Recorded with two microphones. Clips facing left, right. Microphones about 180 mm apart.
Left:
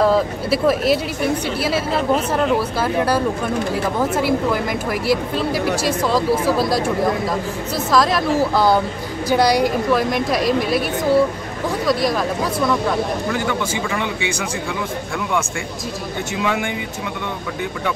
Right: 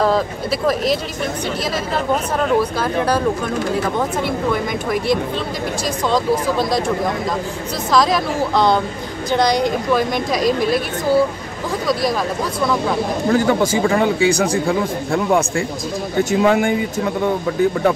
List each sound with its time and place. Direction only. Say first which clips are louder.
0.0 s a woman's voice: left 1 dB; 5° left (ahead or behind)
4.2 s a woman's voice: left 1 dB; 5° left (ahead or behind)
5.9 s a woman's voice: right 2 dB; 5° left (ahead or behind)
7.9 s a woman's voice: even; centre (ahead or behind)
13.3 s speech: right 6 dB; 40° right (ahead or behind)